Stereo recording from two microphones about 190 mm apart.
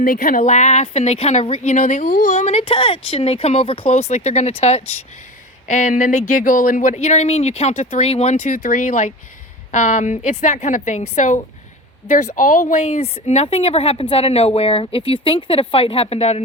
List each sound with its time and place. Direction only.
0.0 s a woman's voice: 45° left (ahead or behind)